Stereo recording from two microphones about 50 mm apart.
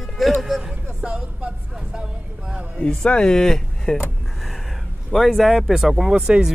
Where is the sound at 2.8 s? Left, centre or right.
Centre.